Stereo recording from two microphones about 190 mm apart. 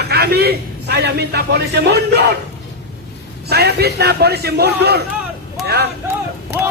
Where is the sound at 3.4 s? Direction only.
55° right (ahead or behind).